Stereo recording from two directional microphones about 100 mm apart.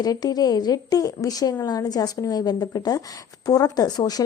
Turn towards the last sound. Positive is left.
turn(degrees=40)  # may be behind; listen again after turning